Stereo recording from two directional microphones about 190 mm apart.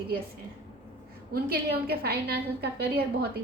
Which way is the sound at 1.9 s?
55° right (ahead or behind).